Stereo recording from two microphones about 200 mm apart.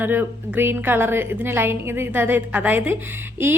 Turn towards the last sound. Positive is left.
turn(degrees=-10)  # may be behind; listen again after turning